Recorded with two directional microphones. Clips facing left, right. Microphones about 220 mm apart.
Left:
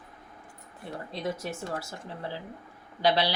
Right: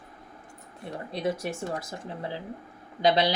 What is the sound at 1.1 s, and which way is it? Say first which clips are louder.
Speech: right 4 dB; 15° right (ahead or behind).